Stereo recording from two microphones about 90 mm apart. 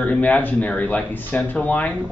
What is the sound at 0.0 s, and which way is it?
Speech, 15° left (ahead or behind).